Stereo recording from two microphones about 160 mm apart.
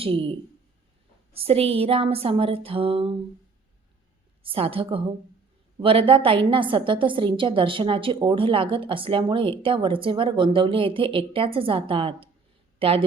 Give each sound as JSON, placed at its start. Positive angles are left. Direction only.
{"t": 0.0, "sound": "a woman's voice", "side_deg": -35}
{"t": 4.4, "sound": "a woman's voice", "side_deg": -35}